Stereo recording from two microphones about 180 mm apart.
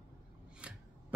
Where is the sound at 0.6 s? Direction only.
5° right (ahead or behind).